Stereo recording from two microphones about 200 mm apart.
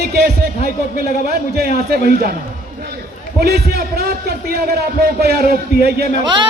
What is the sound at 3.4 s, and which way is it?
A man's voice, 50° right (ahead or behind).